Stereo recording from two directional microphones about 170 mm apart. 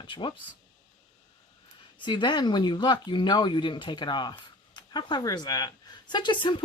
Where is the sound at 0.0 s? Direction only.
30° left (ahead or behind).